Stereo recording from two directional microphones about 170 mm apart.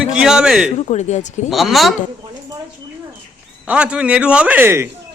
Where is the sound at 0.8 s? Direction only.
45° left (ahead or behind).